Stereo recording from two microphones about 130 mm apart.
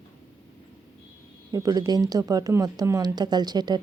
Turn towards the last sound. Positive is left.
turn(degrees=-35)  # may be behind; listen again after turning